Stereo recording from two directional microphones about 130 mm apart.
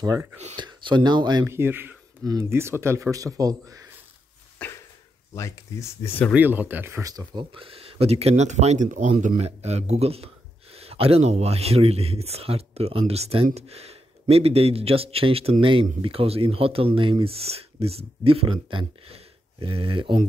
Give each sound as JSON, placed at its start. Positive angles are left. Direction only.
{"t": 0.0, "sound": "speech", "side_deg": -25}
{"t": 0.6, "sound": "speech", "side_deg": -35}
{"t": 1.4, "sound": "speech", "side_deg": -20}
{"t": 4.6, "sound": "a sound", "side_deg": 10}
{"t": 5.3, "sound": "speech", "side_deg": 20}
{"t": 6.3, "sound": "speech", "side_deg": -15}
{"t": 7.5, "sound": "speech", "side_deg": -45}